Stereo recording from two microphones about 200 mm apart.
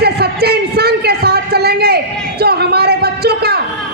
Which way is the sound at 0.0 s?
50° right (ahead or behind).